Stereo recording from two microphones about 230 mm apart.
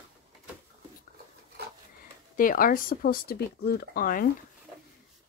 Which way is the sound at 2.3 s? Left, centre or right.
Left.